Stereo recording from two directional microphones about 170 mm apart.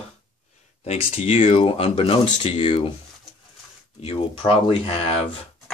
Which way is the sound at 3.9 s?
30° left (ahead or behind).